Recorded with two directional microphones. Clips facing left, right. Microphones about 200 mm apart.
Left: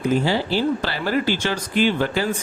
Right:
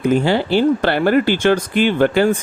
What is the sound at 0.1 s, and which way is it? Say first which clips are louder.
Speech: right 5 dB; 60° right (ahead or behind).